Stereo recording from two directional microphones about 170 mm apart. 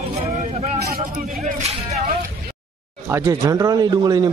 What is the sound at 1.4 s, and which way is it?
Speech, 40° right (ahead or behind).